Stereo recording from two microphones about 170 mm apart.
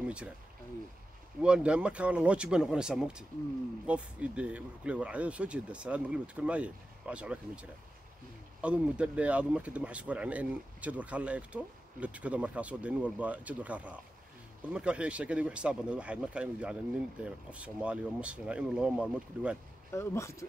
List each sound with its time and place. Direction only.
1.4 s speech: 5° right (ahead or behind)
19.9 s speech: 15° left (ahead or behind)